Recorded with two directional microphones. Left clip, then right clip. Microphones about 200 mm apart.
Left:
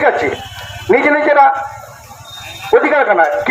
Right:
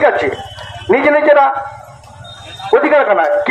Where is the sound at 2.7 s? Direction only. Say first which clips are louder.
Even; 60° right (ahead or behind).